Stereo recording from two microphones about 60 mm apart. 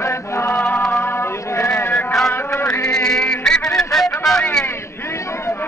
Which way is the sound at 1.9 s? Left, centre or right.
Left.